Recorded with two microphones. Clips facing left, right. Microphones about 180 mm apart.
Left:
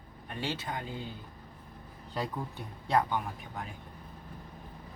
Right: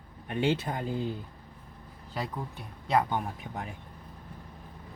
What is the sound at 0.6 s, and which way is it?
Speech, 50° right (ahead or behind).